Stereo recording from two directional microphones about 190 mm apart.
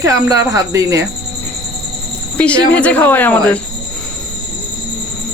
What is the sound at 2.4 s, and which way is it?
Speech, 5° left (ahead or behind).